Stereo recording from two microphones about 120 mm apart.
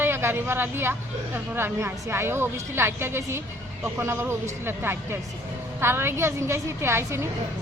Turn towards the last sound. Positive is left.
turn(degrees=-20)  # may be behind; listen again after turning